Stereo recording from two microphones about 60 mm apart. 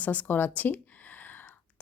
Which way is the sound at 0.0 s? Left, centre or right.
Left.